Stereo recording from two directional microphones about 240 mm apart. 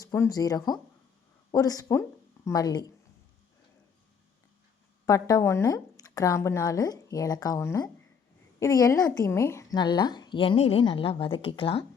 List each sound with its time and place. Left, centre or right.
0.0 s a woman's voice: centre
5.0 s a woman's voice: centre